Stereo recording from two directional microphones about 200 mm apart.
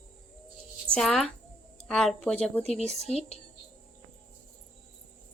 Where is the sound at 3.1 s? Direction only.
30° left (ahead or behind).